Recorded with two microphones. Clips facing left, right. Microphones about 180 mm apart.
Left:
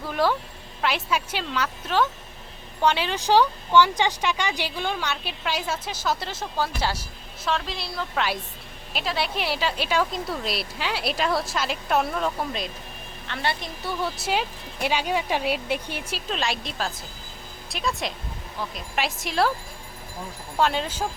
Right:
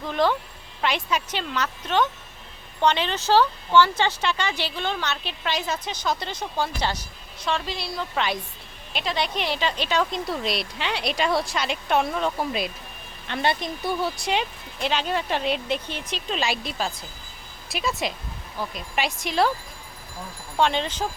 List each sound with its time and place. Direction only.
0.0 s speech: 5° left (ahead or behind)
13.2 s a woman's voice: 20° right (ahead or behind)
14.0 s speech: 5° left (ahead or behind)
20.6 s speech: 5° left (ahead or behind)